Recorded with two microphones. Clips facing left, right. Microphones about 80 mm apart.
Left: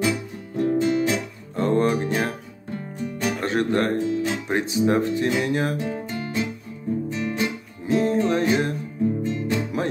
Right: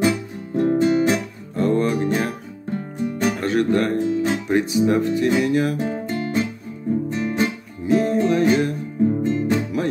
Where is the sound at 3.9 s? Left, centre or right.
Right.